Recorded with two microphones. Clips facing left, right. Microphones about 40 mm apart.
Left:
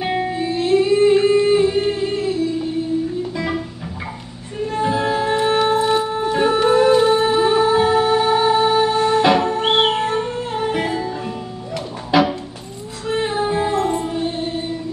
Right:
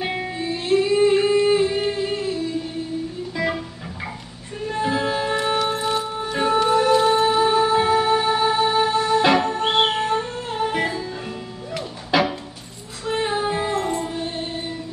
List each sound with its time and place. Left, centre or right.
0.0 s music: centre
4.6 s music: centre
6.5 s music: left
7.0 s music: centre
8.6 s music: centre
8.9 s music: left
9.2 s music: centre
13.9 s music: centre